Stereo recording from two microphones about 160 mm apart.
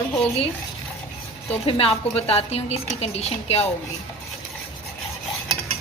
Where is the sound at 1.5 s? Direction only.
35° left (ahead or behind).